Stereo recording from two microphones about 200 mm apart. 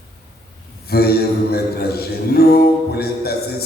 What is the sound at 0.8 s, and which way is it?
A man's voice, 50° left (ahead or behind).